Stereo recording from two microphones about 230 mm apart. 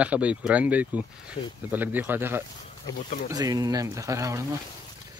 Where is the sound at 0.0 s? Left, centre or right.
Centre.